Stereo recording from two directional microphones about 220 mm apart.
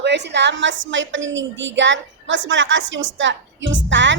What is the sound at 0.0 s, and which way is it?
A woman's voice, 50° right (ahead or behind).